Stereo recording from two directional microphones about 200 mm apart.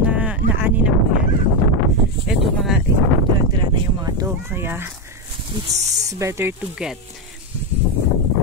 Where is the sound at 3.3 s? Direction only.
20° right (ahead or behind).